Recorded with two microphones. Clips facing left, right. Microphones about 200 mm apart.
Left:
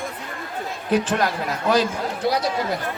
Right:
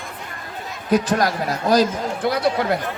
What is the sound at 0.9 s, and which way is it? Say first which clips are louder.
Speech: right 2 dB; 40° right (ahead or behind).